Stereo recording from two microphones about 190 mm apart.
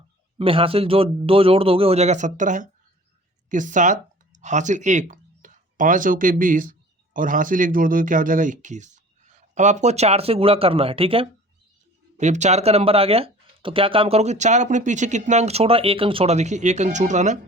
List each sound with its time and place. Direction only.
0.3 s a man's voice: 30° right (ahead or behind)